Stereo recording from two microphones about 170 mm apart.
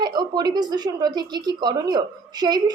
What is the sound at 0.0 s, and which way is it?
A woman's voice, 25° right (ahead or behind).